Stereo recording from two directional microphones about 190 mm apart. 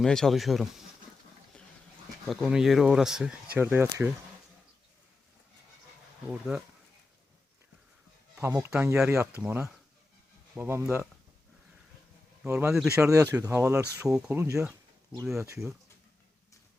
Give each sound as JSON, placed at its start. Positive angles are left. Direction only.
{"t": 0.0, "sound": "speech", "side_deg": 0}
{"t": 2.2, "sound": "speech", "side_deg": 0}
{"t": 8.4, "sound": "speech", "side_deg": -15}
{"t": 12.4, "sound": "speech", "side_deg": -10}